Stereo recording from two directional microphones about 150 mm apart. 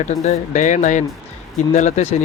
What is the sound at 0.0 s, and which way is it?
Speech, 50° left (ahead or behind).